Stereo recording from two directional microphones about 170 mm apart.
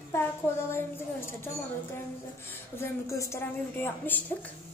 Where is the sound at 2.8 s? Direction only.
15° left (ahead or behind).